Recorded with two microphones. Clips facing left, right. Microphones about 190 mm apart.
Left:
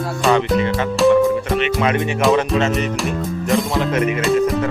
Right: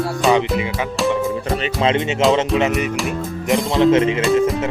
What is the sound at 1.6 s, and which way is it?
Music, 25° right (ahead or behind).